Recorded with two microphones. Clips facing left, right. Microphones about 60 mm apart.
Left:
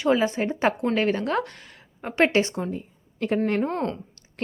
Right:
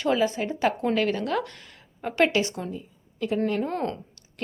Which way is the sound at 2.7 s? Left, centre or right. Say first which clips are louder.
Left 2 dB; left.